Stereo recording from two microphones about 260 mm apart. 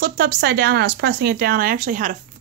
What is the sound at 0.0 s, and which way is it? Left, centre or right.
Speech, right.